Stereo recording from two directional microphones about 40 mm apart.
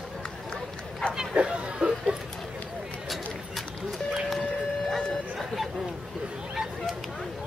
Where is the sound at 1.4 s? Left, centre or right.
Right.